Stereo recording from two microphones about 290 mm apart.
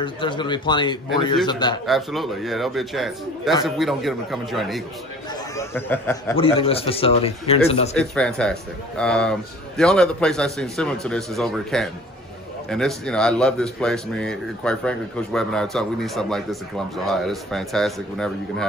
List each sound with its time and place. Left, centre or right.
0.0 s speech: centre
1.9 s speech: centre
6.3 s speech: centre
8.0 s speech: centre